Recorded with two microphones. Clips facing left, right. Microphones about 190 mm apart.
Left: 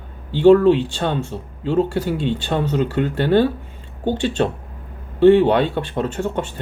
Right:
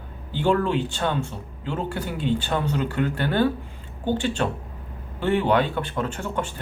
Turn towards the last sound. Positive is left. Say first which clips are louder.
# left 5 dB
turn(degrees=25)  # may be behind; listen again after turning